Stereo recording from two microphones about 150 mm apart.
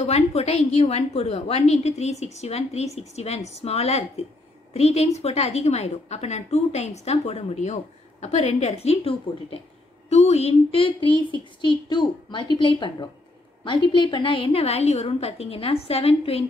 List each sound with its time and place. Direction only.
0.0 s a woman's voice: 45° left (ahead or behind)